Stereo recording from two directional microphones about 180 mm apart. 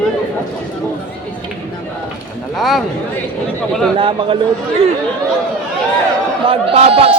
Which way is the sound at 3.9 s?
30° right (ahead or behind).